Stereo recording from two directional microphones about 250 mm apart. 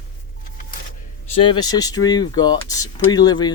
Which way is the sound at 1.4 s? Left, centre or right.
Centre.